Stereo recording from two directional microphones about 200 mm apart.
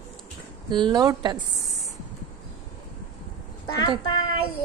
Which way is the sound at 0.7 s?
20° right (ahead or behind).